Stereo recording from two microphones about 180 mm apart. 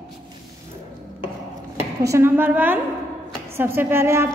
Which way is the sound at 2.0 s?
15° right (ahead or behind).